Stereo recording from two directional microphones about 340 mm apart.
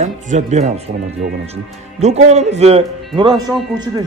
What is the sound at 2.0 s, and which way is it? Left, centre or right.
A man's voice, centre.